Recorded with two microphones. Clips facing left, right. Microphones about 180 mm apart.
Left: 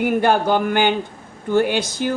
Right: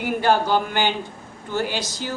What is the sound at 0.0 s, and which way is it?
Speech, 55° left (ahead or behind).